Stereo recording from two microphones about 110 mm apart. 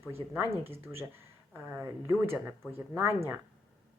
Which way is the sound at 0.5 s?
60° right (ahead or behind).